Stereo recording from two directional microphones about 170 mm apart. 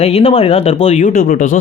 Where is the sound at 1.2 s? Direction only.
60° left (ahead or behind).